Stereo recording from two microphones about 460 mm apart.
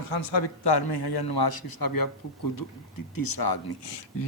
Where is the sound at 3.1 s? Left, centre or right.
Left.